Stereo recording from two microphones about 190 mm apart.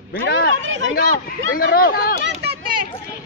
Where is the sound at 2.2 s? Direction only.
60° right (ahead or behind).